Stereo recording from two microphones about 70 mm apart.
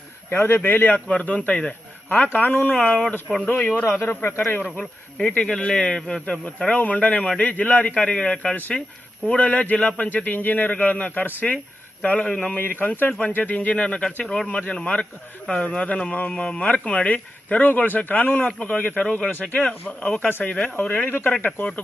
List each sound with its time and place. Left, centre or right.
0.3 s speech: left
4.8 s a man's voice: centre
6.2 s a man's voice: centre
12.5 s a man's voice: left
19.3 s a man's voice: left